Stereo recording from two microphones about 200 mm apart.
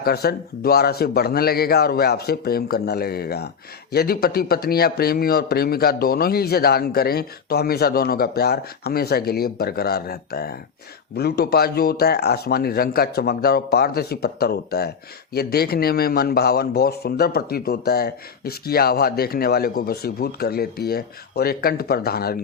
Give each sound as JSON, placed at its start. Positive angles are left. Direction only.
{"t": 0.0, "sound": "speech", "side_deg": 50}